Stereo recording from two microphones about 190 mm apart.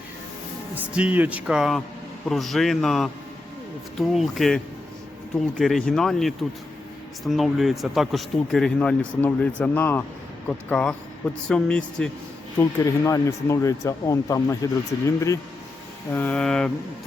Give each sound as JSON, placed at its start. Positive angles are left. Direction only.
{"t": 0.9, "sound": "speech", "side_deg": -10}
{"t": 12.5, "sound": "speech", "side_deg": 15}